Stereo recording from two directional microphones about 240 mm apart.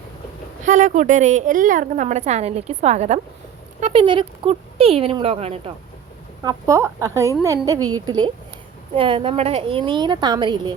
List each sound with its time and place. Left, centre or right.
0.6 s a woman's voice: right
6.4 s speech: centre